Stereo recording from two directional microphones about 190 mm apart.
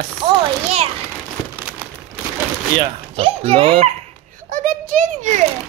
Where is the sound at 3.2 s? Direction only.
30° right (ahead or behind).